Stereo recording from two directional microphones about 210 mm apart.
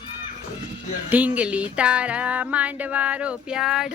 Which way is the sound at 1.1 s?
5° right (ahead or behind).